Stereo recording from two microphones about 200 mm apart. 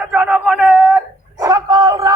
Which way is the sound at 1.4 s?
15° right (ahead or behind).